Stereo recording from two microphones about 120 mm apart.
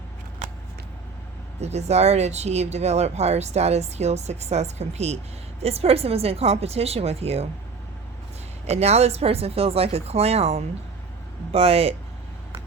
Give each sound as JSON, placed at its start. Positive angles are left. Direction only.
{"t": 1.6, "sound": "speech", "side_deg": -65}
{"t": 8.6, "sound": "speech", "side_deg": -60}